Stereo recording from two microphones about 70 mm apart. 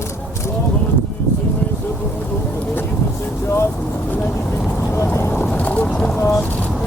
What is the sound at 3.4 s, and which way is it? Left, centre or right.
Speech, left.